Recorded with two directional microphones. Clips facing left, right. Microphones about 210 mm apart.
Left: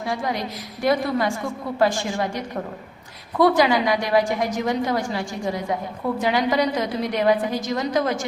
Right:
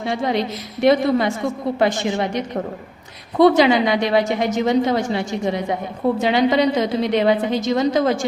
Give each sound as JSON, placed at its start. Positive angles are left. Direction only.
{"t": 0.0, "sound": "a woman's voice", "side_deg": -25}